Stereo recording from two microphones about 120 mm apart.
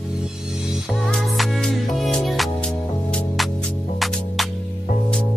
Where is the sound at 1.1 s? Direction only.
Centre (ahead or behind).